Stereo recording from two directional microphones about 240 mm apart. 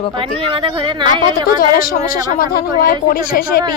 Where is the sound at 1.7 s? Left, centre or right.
Left.